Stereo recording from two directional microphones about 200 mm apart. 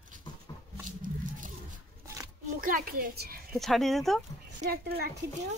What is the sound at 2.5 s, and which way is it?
Speech, 40° right (ahead or behind).